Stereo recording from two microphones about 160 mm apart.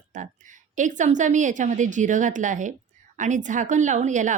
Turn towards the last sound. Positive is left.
turn(degrees=-50)  # may be behind; listen again after turning